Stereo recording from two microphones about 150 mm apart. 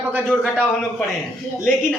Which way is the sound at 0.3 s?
Centre (ahead or behind).